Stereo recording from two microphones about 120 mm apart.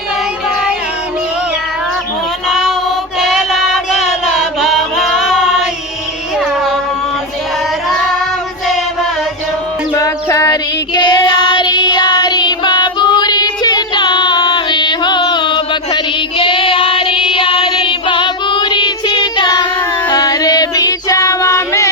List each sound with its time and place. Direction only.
2.5 s child singing: centre (ahead or behind)
3.2 s music: centre (ahead or behind)
9.9 s child singing: 25° left (ahead or behind)